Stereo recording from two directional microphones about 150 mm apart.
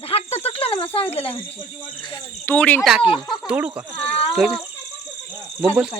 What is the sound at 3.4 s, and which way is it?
Speech, 10° right (ahead or behind).